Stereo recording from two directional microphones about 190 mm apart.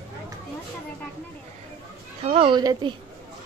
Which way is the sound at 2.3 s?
30° right (ahead or behind).